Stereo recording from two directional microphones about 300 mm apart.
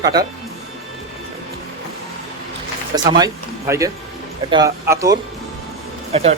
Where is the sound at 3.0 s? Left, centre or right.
Centre.